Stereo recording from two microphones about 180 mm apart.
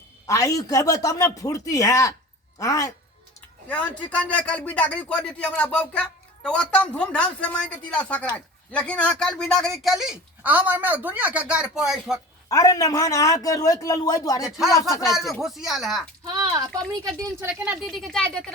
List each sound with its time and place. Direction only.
0.3 s a man's voice: 20° left (ahead or behind); by 12.2 s 5° right (ahead or behind)
12.5 s a man's voice: 20° left (ahead or behind)
14.4 s speech: centre (ahead or behind)
14.7 s speech: 20° left (ahead or behind)
15.1 s speech: centre (ahead or behind)
16.2 s speech: 20° right (ahead or behind)
17.5 s speech: 5° right (ahead or behind)